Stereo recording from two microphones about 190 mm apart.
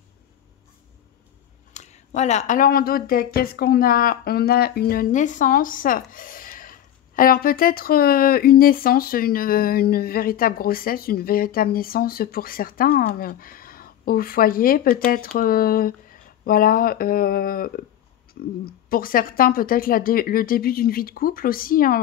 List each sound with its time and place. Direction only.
1.7 s speech: 40° left (ahead or behind)
18.9 s speech: 50° left (ahead or behind)